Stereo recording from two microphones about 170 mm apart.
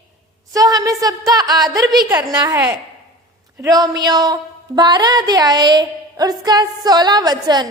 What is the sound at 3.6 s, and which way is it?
A woman's voice, 20° right (ahead or behind).